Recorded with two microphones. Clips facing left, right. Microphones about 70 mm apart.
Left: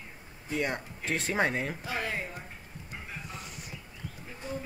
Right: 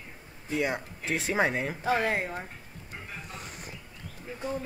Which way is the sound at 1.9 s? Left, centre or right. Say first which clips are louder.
Right 7 dB; right.